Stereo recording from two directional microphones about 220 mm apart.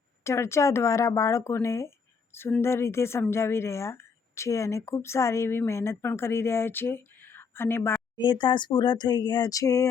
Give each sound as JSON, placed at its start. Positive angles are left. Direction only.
{"t": 0.3, "sound": "speech", "side_deg": 10}
{"t": 8.1, "sound": "speech", "side_deg": 20}